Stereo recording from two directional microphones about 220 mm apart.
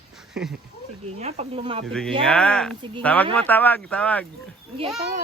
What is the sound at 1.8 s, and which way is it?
Speech, 5° left (ahead or behind).